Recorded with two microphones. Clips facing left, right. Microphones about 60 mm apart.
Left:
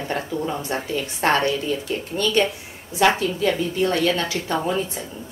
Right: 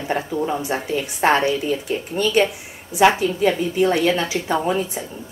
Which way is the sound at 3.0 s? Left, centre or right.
Centre.